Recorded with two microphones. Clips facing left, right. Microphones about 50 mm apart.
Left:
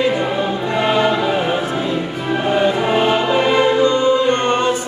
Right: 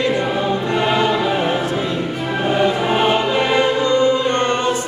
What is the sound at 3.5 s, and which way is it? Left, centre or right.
Music, left.